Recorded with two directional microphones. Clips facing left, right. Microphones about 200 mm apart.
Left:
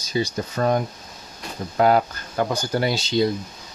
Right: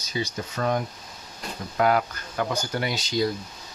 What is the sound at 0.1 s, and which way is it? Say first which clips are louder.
Speech: left 6 dB; 35° left (ahead or behind).